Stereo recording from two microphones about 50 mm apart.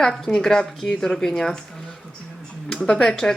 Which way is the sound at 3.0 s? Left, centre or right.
Centre.